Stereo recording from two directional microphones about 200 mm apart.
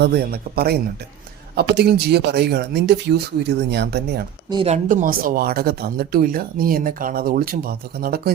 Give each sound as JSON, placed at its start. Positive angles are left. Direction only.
{"t": 0.0, "sound": "speech", "side_deg": -50}
{"t": 4.4, "sound": "speech", "side_deg": -20}
{"t": 4.7, "sound": "speech", "side_deg": -40}